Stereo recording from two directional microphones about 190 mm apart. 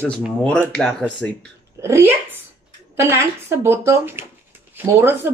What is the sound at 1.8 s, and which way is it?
Speech, 15° right (ahead or behind).